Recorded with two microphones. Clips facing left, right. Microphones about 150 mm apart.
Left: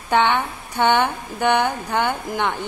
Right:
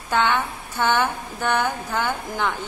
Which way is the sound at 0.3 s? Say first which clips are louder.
Left 2 dB; 15° left (ahead or behind).